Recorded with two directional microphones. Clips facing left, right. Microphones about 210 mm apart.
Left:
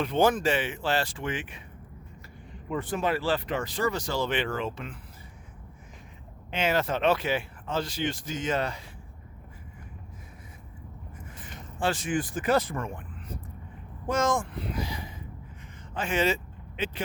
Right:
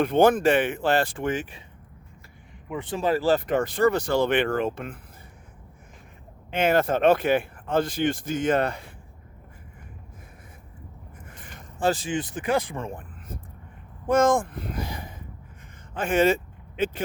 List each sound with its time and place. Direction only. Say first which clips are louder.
0.0 s speech: right 5 dB; 55° right (ahead or behind); by 1.6 s 40° right (ahead or behind)
2.9 s speech: right 6 dB; 35° right (ahead or behind); by 4.9 s 50° right (ahead or behind)
6.5 s speech: right 5 dB; 55° right (ahead or behind)
11.8 s speech: right 3 dB; 35° right (ahead or behind); by 12.7 s 15° right (ahead or behind)
12.7 s speech: right 1 dB; 30° right (ahead or behind)
13.0 s vehicle: even; 50° right (ahead or behind)
14.1 s speech: right 6 dB; 55° right (ahead or behind)